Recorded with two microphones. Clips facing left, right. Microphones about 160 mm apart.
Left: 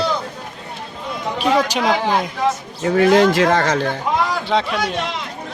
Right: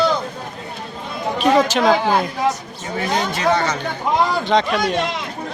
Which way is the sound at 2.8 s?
75° left (ahead or behind).